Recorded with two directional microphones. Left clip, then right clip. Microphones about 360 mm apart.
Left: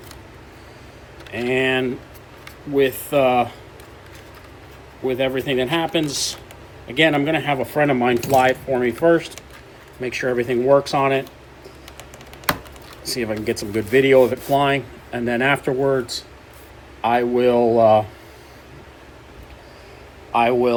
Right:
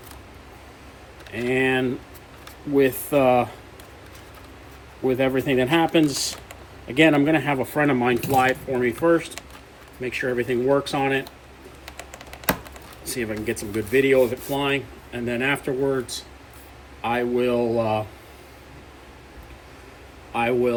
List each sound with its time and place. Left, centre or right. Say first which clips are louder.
1.3 s speech: left 2 dB; centre
5.0 s speech: left 1 dB; centre
13.1 s speech: left 4 dB; centre
17.0 s speech: left 5 dB; centre
20.3 s speech: left 5 dB; centre